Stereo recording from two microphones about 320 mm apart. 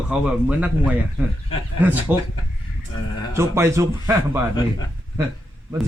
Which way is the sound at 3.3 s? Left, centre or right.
Centre.